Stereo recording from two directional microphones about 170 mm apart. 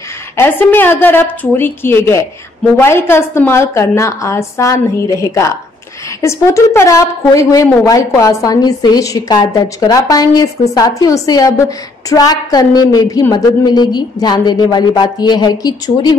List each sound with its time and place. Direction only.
0.4 s a woman's voice: 10° left (ahead or behind)